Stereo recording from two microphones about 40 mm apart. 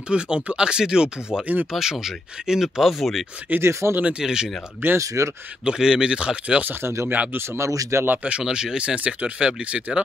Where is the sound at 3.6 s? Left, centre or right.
Right.